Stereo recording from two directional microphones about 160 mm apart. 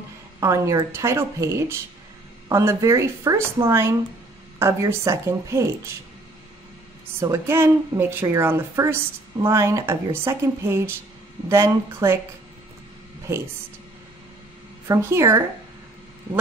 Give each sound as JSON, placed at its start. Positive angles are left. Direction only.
{"t": 0.4, "sound": "a woman's voice", "side_deg": -20}
{"t": 7.2, "sound": "a woman's voice", "side_deg": -15}
{"t": 14.9, "sound": "a woman's voice", "side_deg": -20}